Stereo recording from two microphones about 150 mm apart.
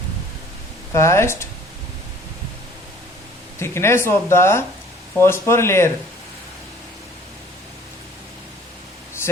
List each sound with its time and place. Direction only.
0.9 s speech: 20° left (ahead or behind)
3.6 s speech: 15° left (ahead or behind)